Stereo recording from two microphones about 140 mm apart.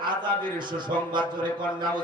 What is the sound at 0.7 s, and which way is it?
Speech, 35° right (ahead or behind).